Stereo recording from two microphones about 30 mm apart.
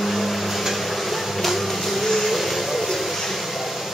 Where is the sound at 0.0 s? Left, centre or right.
Centre.